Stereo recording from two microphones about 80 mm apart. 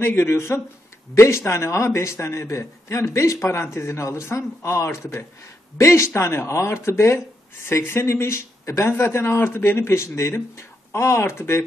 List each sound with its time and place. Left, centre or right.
0.0 s a man's voice: left